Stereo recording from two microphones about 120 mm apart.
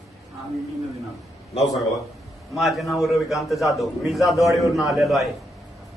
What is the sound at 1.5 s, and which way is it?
Speech, 65° left (ahead or behind).